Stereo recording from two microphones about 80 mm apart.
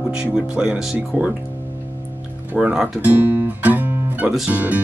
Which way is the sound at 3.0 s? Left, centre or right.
Right.